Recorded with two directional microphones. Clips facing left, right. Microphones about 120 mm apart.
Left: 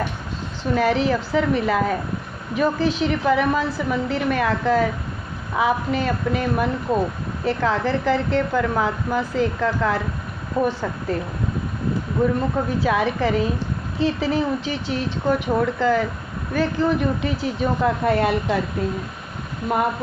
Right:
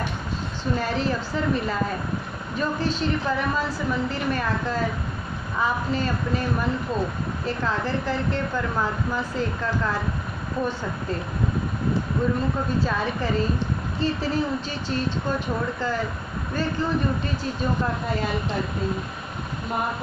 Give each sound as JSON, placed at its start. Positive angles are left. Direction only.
{"t": 0.7, "sound": "a woman's voice", "side_deg": 75}
{"t": 7.4, "sound": "a woman's voice", "side_deg": 80}
{"t": 10.6, "sound": "a woman's voice", "side_deg": 70}
{"t": 12.8, "sound": "a woman's voice", "side_deg": 75}
{"t": 19.7, "sound": "a woman's voice", "side_deg": 70}